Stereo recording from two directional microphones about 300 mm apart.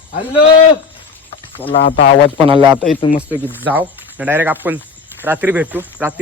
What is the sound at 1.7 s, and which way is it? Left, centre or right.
Speech, left.